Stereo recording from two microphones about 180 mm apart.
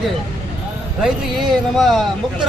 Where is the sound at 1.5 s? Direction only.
Centre (ahead or behind).